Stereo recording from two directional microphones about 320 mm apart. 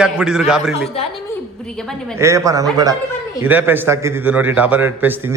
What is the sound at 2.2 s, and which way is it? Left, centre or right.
A man's voice, centre.